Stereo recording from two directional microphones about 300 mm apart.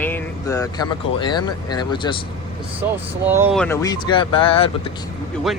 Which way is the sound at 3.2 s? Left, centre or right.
Centre.